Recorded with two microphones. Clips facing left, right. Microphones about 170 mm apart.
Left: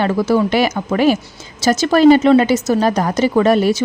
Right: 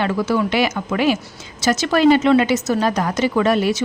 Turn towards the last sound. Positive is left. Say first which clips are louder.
# left 4 dB
turn(degrees=40)  # may be behind; listen again after turning